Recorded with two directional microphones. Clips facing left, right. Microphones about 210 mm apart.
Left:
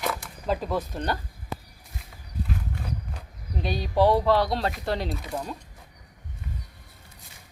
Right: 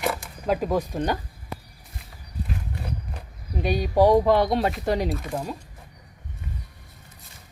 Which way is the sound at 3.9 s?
15° right (ahead or behind).